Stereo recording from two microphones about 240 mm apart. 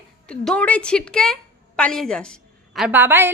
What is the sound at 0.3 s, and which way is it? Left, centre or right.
A woman's voice, centre.